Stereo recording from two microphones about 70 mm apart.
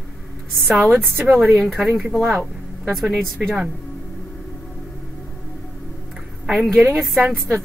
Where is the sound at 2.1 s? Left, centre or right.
Centre.